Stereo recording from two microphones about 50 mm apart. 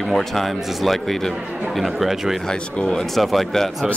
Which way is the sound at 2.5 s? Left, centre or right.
Centre.